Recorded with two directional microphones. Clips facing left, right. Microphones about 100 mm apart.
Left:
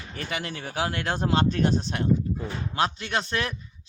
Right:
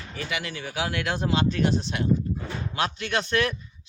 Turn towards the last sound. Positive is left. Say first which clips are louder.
# right 3 dB
turn(degrees=30)  # may be behind; listen again after turning